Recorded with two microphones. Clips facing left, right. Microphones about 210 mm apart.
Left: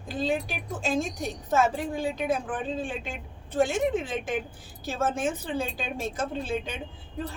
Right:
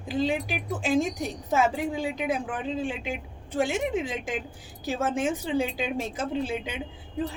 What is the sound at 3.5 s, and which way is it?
A woman's voice, 10° right (ahead or behind).